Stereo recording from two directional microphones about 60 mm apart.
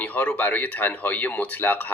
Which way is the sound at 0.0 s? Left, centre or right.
Left.